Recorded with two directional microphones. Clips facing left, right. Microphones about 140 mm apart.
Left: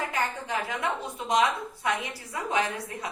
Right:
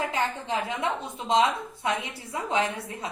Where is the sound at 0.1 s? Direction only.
20° right (ahead or behind).